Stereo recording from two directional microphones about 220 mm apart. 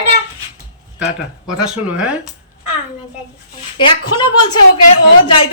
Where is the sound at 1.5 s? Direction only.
5° right (ahead or behind).